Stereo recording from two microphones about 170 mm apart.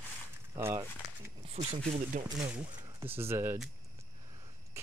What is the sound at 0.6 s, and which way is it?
Speech, 15° right (ahead or behind).